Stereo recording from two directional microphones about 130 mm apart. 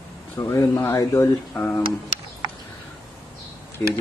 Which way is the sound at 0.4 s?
20° left (ahead or behind).